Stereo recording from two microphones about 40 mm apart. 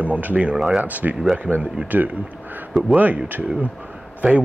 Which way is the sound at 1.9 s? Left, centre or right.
Right.